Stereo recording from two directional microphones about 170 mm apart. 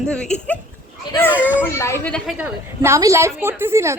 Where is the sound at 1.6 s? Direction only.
15° left (ahead or behind).